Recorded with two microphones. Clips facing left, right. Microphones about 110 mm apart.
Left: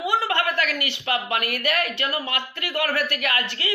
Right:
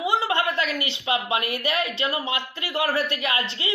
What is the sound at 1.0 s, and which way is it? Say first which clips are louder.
A woman's voice: right 1 dB; 25° right (ahead or behind).